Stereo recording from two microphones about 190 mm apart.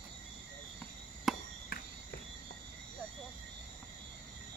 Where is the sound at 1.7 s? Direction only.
55° left (ahead or behind).